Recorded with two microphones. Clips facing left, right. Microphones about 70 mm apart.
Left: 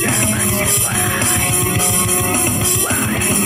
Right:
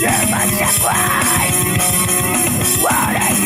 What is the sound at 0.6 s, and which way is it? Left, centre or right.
Music, right.